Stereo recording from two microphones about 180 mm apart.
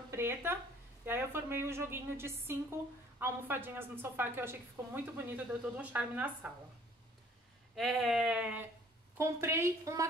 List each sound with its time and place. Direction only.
0.1 s a woman's voice: 15° right (ahead or behind)
7.7 s a sound: centre (ahead or behind)
9.2 s a woman's voice: 15° right (ahead or behind)